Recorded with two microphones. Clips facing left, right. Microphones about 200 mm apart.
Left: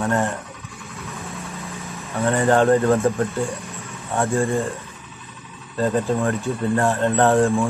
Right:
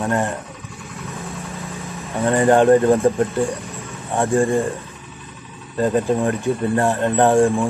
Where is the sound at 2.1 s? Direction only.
15° right (ahead or behind).